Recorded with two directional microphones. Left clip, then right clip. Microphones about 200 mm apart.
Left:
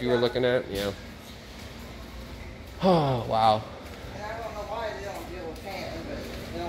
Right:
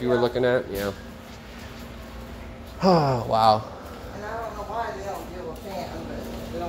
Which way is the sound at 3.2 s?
10° right (ahead or behind).